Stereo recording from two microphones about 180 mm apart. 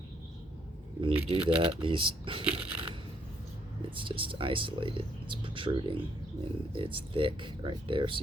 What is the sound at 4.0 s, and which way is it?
Speech, 30° right (ahead or behind).